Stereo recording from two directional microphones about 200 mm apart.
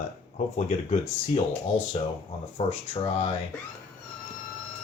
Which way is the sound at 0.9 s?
30° left (ahead or behind).